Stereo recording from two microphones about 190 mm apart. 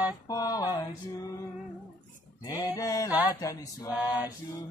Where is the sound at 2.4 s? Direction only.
15° left (ahead or behind).